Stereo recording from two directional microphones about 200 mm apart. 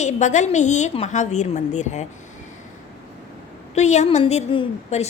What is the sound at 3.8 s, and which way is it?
A woman's voice, 35° left (ahead or behind).